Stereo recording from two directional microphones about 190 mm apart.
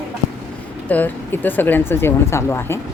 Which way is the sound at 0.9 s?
10° left (ahead or behind).